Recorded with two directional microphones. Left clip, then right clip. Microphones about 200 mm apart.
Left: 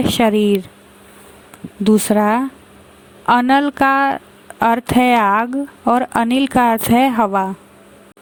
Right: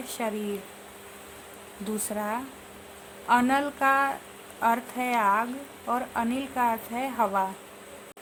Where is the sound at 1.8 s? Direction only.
45° left (ahead or behind).